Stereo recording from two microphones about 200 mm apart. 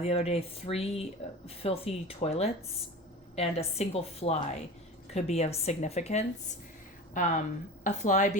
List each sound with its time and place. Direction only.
0.0 s a woman's voice: 30° left (ahead or behind)